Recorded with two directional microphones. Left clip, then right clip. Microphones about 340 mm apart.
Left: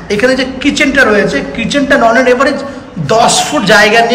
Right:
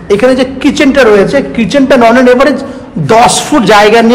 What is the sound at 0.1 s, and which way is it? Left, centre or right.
A man's voice, centre.